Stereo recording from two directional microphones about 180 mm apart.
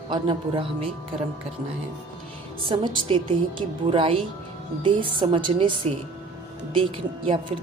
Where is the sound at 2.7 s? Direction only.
25° right (ahead or behind).